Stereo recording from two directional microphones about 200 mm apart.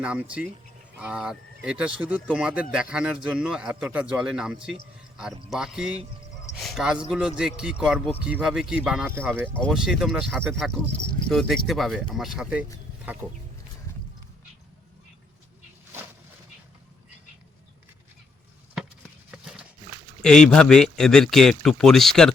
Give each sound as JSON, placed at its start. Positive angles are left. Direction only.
{"t": 0.0, "sound": "speech", "side_deg": -5}
{"t": 6.5, "sound": "a sound", "side_deg": 0}
{"t": 7.1, "sound": "speech", "side_deg": -5}
{"t": 9.1, "sound": "speech", "side_deg": 5}
{"t": 19.3, "sound": "a sound", "side_deg": -5}
{"t": 20.2, "sound": "speech", "side_deg": 5}